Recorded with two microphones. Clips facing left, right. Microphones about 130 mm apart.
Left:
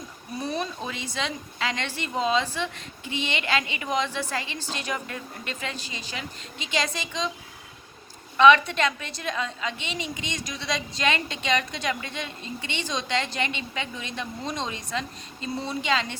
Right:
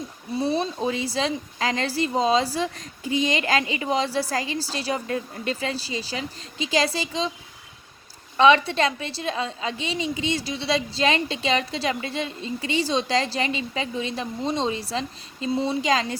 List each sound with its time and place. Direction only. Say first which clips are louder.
0.3 s speech: right 6 dB; 30° right (ahead or behind)
8.4 s speech: even; 30° right (ahead or behind)